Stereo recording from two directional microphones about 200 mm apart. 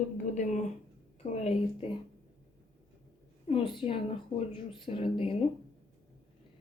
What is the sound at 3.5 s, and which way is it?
Speech, 25° left (ahead or behind).